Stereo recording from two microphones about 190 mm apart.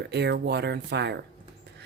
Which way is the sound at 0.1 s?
60° right (ahead or behind).